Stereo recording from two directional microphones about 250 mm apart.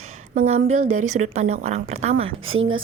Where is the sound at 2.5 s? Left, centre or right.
Right.